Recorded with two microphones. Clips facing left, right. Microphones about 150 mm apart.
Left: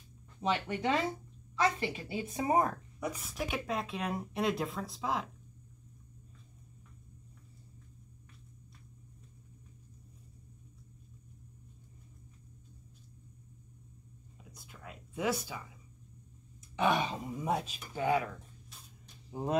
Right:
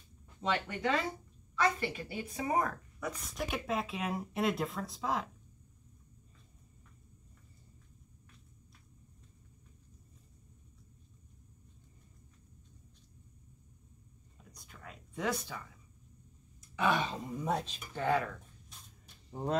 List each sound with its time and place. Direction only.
0.4 s a woman's voice: 20° left (ahead or behind)
3.0 s speech: 5° left (ahead or behind)
14.4 s whispering: 5° left (ahead or behind)
16.7 s speech: 20° left (ahead or behind)